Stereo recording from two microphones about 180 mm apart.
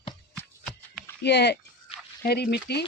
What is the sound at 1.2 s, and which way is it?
Speech, 70° left (ahead or behind).